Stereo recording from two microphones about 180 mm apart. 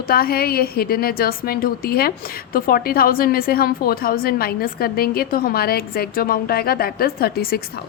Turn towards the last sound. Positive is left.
turn(degrees=60)  # may be behind; listen again after turning